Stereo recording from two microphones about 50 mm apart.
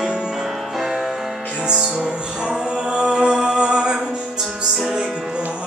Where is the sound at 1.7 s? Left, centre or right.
Centre.